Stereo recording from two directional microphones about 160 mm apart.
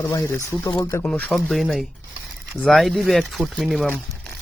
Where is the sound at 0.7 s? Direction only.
25° left (ahead or behind).